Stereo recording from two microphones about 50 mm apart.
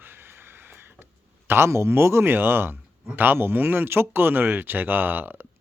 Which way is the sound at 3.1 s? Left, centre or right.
Right.